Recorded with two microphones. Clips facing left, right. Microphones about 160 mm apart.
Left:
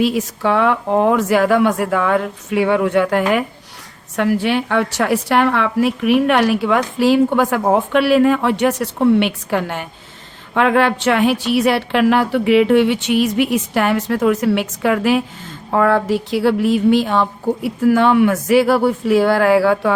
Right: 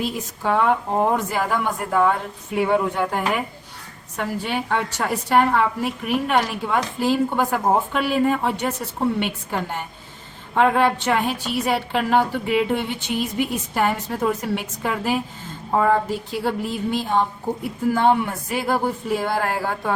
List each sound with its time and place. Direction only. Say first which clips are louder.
0.0 s a woman's voice: left 8 dB; 85° left